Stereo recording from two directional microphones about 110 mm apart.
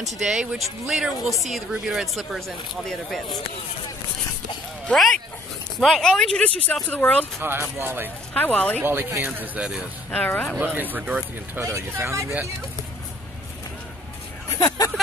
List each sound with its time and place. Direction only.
0.0 s speech: 5° right (ahead or behind)
4.8 s speech: 5° left (ahead or behind)
7.3 s speech: 20° right (ahead or behind)
8.3 s speech: 15° left (ahead or behind)
8.8 s speech: 20° right (ahead or behind)
10.1 s speech: 15° left (ahead or behind)
10.6 s speech: 15° right (ahead or behind)
11.6 s speech: 25° right (ahead or behind)